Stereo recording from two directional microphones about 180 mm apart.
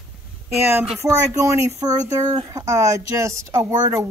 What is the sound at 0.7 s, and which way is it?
Speech, 15° right (ahead or behind).